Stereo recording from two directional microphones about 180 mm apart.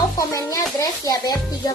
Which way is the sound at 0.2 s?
20° left (ahead or behind).